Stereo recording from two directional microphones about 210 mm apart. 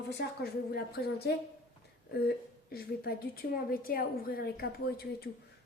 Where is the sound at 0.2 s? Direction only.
50° left (ahead or behind).